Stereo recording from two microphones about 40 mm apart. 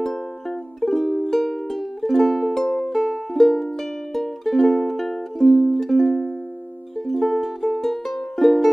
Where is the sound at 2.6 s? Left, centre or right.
Centre.